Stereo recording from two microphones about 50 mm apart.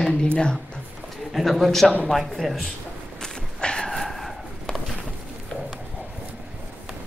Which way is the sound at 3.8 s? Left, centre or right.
Centre.